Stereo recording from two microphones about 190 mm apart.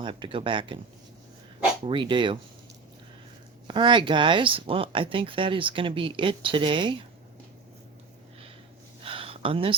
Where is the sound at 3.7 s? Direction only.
25° right (ahead or behind).